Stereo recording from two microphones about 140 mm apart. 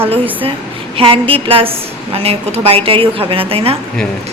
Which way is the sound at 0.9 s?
40° right (ahead or behind).